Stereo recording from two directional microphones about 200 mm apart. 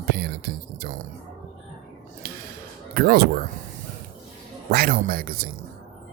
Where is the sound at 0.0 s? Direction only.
50° right (ahead or behind).